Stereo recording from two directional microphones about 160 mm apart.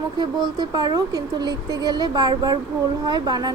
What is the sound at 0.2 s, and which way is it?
Speech, 25° right (ahead or behind).